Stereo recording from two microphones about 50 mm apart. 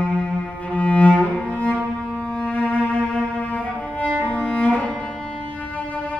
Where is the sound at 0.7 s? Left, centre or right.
Left.